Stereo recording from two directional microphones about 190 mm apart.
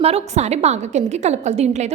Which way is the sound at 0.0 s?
35° right (ahead or behind).